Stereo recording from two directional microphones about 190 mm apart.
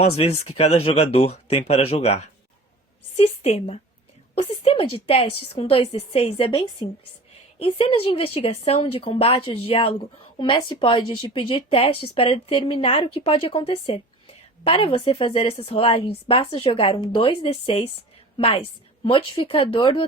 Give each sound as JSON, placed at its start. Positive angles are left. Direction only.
{"t": 0.0, "sound": "a woman's voice", "side_deg": 30}